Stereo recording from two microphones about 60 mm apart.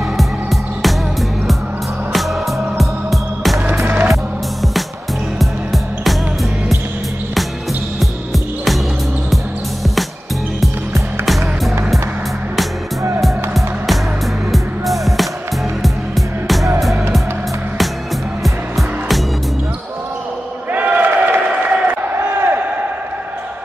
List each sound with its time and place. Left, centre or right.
0.2 s music: centre
2.1 s music: centre
3.7 s skateboard: right
5.4 s music: centre
8.0 s music: centre
10.6 s music: centre
13.2 s music: centre
18.4 s music: centre
20.7 s a sound: right
21.5 s applause: right
22.1 s crowd: right